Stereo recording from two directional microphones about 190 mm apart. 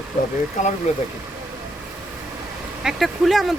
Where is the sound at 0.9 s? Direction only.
35° left (ahead or behind).